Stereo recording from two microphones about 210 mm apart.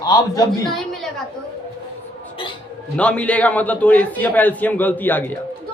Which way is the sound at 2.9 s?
5° left (ahead or behind).